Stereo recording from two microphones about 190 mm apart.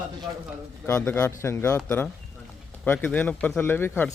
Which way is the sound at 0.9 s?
10° left (ahead or behind).